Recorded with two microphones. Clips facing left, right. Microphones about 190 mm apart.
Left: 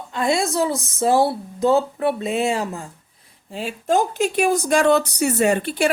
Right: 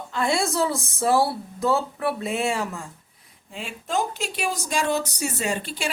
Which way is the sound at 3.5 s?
40° left (ahead or behind).